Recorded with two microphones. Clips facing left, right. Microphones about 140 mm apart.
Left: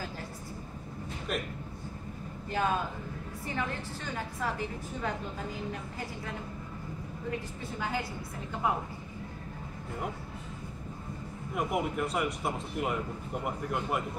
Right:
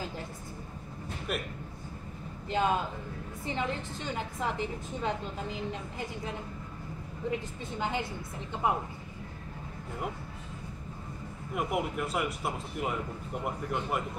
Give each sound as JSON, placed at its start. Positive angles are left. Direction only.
{"t": 1.3, "sound": "speech", "side_deg": -5}
{"t": 2.5, "sound": "a woman's voice", "side_deg": -20}
{"t": 7.8, "sound": "a woman's voice", "side_deg": -20}
{"t": 11.5, "sound": "speech", "side_deg": 0}